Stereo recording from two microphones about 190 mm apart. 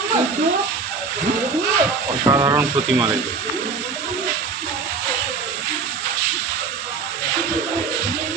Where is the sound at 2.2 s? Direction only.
20° right (ahead or behind).